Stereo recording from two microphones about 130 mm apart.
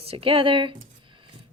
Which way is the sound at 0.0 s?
45° right (ahead or behind).